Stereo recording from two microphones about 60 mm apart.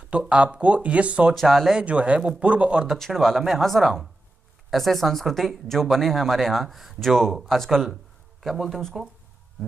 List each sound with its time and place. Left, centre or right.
0.1 s speech: centre
1.3 s speech: centre
1.7 s speech: centre
2.9 s speech: centre
7.9 s a sound: centre